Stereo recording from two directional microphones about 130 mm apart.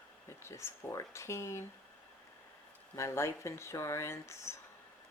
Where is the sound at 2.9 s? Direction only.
25° left (ahead or behind).